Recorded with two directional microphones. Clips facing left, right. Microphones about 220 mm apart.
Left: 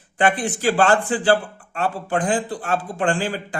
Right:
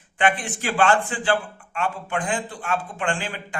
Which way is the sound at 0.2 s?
35° left (ahead or behind).